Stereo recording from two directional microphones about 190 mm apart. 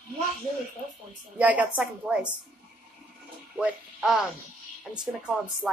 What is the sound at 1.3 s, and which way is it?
Speech, 5° right (ahead or behind).